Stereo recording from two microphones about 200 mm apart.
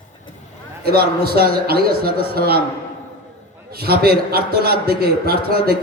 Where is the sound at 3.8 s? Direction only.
50° right (ahead or behind).